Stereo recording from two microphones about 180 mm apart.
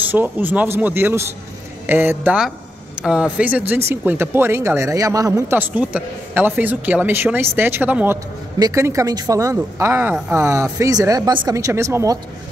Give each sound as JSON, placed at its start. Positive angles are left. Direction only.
{"t": 0.1, "sound": "speech", "side_deg": -10}